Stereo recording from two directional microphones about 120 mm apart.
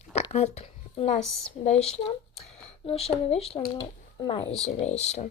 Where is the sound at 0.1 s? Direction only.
65° left (ahead or behind).